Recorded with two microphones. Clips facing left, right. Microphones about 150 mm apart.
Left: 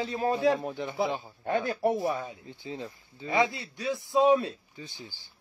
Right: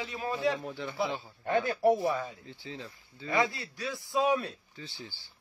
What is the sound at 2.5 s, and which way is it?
A man's voice, 15° left (ahead or behind).